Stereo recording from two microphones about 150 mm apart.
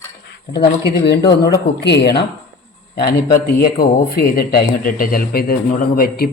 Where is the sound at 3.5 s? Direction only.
90° left.